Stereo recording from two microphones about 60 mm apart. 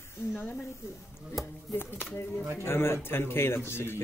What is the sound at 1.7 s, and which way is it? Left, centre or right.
Speech, left.